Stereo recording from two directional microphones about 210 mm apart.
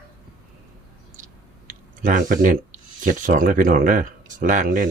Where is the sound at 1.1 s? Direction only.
40° right (ahead or behind).